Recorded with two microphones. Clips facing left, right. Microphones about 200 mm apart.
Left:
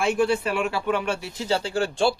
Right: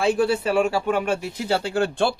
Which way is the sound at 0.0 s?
35° right (ahead or behind).